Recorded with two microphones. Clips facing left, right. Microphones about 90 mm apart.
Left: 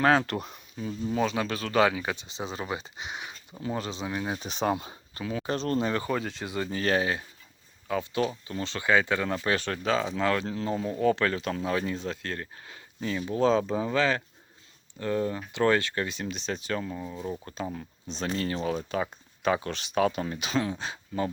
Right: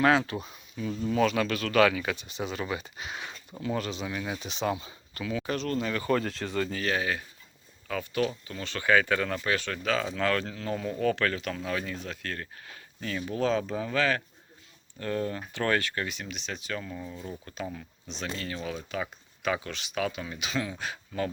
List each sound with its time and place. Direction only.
0.0 s speech: 40° left (ahead or behind)
0.3 s speech: 55° left (ahead or behind)
1.1 s speech: 20° left (ahead or behind); by 4.9 s 50° left (ahead or behind)
5.1 s speech: 30° left (ahead or behind)
6.1 s speech: 10° left (ahead or behind)
6.8 s speech: 30° left (ahead or behind)
16.9 s speech: 15° left (ahead or behind)
17.4 s speech: 35° left (ahead or behind)